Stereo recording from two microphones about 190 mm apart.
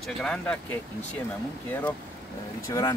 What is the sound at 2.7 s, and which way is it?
Speech, 20° left (ahead or behind).